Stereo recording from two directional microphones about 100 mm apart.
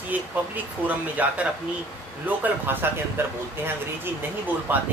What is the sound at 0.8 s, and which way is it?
Speech, 15° right (ahead or behind).